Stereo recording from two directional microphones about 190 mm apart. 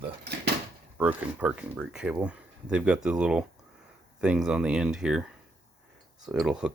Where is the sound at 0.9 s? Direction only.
10° right (ahead or behind).